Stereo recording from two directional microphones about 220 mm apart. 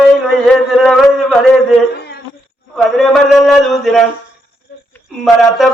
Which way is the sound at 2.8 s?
Centre (ahead or behind).